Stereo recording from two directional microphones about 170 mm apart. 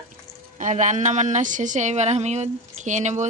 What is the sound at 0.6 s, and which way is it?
Speech, 45° right (ahead or behind).